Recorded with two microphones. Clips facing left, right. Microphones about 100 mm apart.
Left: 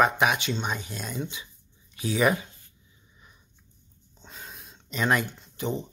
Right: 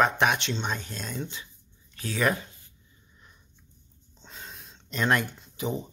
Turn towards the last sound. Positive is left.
turn(degrees=-5)  # may be behind; listen again after turning